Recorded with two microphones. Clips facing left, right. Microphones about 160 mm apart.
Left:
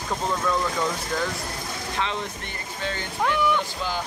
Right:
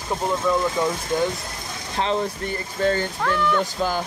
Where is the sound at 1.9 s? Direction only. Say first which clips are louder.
Right 7 dB; 40° right (ahead or behind).